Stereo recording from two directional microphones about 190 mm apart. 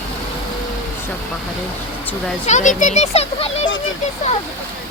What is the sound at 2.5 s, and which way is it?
Speech, 40° left (ahead or behind).